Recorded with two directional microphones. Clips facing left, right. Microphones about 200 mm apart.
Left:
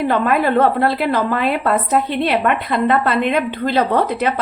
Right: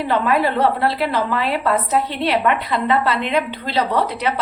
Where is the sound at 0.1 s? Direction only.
50° left (ahead or behind).